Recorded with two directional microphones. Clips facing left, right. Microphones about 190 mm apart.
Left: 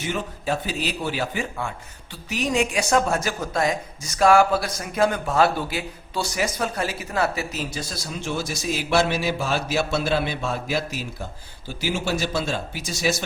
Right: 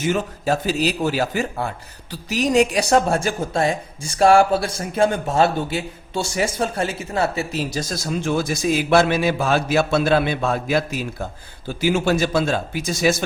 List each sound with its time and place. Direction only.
0.0 s a man's voice: 45° right (ahead or behind)